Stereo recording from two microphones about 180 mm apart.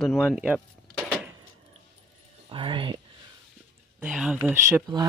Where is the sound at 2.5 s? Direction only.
30° right (ahead or behind).